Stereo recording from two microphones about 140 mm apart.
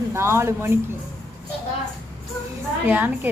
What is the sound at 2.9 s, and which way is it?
Speech, 15° right (ahead or behind).